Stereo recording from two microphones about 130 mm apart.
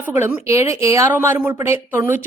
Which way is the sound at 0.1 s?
15° right (ahead or behind).